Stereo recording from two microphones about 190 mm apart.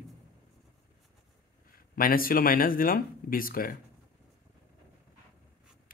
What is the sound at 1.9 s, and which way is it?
Speech, 50° left (ahead or behind).